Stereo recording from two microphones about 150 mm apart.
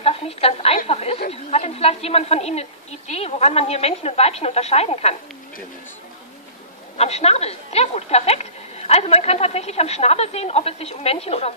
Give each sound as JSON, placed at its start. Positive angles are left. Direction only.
{"t": 0.0, "sound": "a woman's voice", "side_deg": 40}
{"t": 0.8, "sound": "chatter", "side_deg": 40}
{"t": 1.3, "sound": "a woman's voice", "side_deg": 45}
{"t": 7.0, "sound": "a woman's voice", "side_deg": 45}